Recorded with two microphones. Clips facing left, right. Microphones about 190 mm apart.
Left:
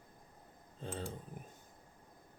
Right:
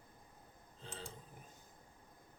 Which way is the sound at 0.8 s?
55° left (ahead or behind).